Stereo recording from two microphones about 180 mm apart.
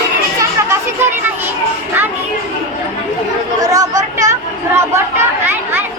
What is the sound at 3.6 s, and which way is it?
Speech, 20° right (ahead or behind).